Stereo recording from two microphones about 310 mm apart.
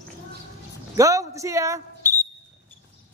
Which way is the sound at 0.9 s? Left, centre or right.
Centre.